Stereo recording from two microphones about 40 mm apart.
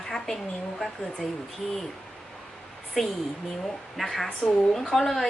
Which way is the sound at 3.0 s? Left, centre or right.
Centre.